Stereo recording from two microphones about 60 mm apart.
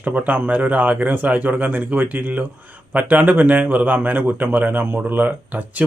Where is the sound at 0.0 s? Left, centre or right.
Right.